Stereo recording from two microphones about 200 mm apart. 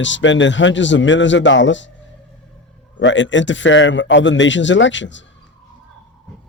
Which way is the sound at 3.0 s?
65° left (ahead or behind).